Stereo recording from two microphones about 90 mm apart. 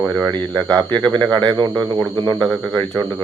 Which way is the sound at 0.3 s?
55° right (ahead or behind).